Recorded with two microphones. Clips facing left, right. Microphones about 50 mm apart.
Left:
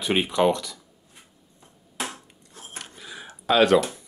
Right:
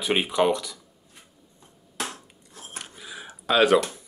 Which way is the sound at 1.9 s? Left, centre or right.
Centre.